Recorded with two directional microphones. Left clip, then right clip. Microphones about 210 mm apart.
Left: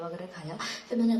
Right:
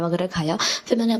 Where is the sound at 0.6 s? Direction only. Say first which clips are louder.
Right 6 dB; 35° right (ahead or behind).